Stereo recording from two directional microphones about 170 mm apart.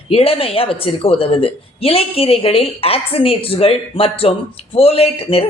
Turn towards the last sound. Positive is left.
turn(degrees=35)  # may be behind; listen again after turning